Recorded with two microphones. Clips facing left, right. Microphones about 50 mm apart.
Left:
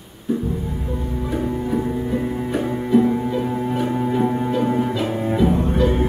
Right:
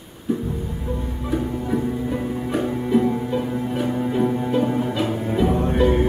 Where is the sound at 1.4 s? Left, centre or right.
Centre.